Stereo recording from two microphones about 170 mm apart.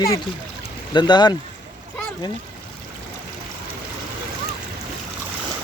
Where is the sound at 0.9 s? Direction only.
25° left (ahead or behind).